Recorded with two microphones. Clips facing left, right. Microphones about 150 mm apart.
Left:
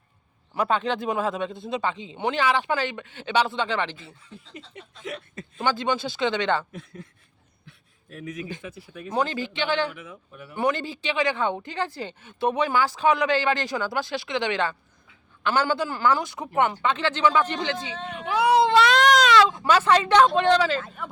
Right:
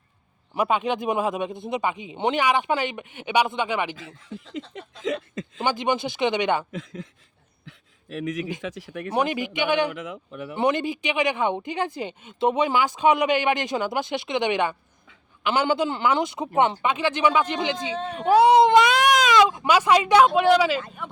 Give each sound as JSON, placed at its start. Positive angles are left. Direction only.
{"t": 0.5, "sound": "speech", "side_deg": -15}
{"t": 3.9, "sound": "speech", "side_deg": -90}
{"t": 5.5, "sound": "speech", "side_deg": -20}
{"t": 6.7, "sound": "speech", "side_deg": -90}
{"t": 8.1, "sound": "speech", "side_deg": -90}
{"t": 9.1, "sound": "speech", "side_deg": -15}
{"t": 9.9, "sound": "speech", "side_deg": -90}
{"t": 10.6, "sound": "speech", "side_deg": -20}
{"t": 17.9, "sound": "speech", "side_deg": -35}
{"t": 18.4, "sound": "speech", "side_deg": -20}